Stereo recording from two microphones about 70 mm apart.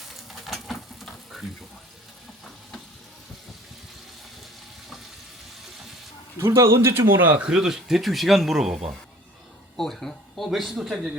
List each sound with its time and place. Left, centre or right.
0.2 s stir: centre
6.4 s speech: right
7.3 s speech: centre
9.7 s speech: centre